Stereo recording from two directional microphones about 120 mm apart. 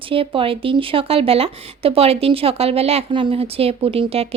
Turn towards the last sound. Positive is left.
turn(degrees=-55)  # may be behind; listen again after turning